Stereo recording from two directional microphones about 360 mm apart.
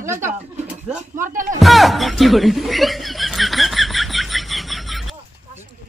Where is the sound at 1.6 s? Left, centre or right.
Centre.